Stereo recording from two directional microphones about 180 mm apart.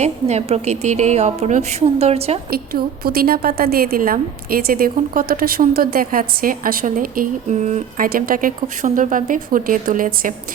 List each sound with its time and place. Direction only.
0.0 s a woman's voice: 35° right (ahead or behind)
2.5 s a woman's voice: 55° right (ahead or behind)